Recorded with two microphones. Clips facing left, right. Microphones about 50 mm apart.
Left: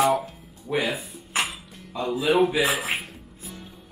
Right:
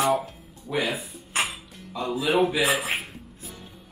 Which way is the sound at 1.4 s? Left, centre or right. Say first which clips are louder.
Even; centre.